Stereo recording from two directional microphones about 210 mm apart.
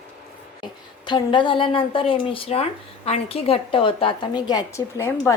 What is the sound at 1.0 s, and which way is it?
Speech, 20° left (ahead or behind).